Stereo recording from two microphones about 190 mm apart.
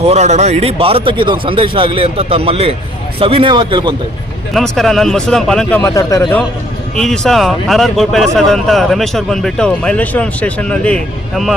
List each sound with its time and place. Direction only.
0.0 s a man's voice: 35° right (ahead or behind)
4.5 s speech: centre (ahead or behind)
6.9 s speech: centre (ahead or behind)